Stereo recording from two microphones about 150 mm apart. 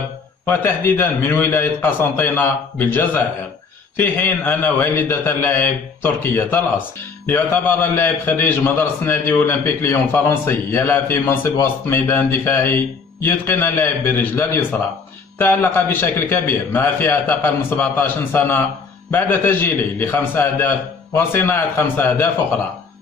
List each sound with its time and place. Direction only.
0.5 s a man's voice: 15° left (ahead or behind)